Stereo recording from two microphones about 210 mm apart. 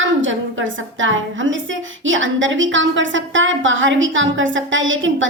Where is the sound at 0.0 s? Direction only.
65° right (ahead or behind).